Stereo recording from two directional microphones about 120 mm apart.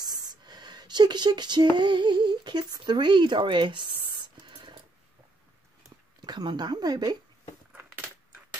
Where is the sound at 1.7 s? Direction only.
40° right (ahead or behind).